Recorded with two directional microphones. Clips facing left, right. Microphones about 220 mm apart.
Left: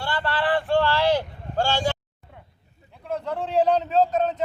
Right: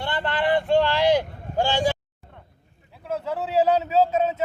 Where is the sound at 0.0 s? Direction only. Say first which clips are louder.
Right 1 dB; 20° right (ahead or behind).